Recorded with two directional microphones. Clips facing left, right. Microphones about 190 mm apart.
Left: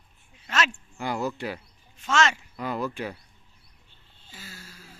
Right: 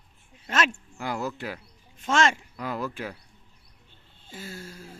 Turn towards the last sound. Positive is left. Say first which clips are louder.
# right 8 dB
turn(degrees=-50)  # may be behind; listen again after turning